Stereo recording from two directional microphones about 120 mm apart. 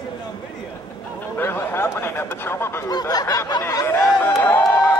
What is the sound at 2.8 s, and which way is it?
Music, 30° left (ahead or behind).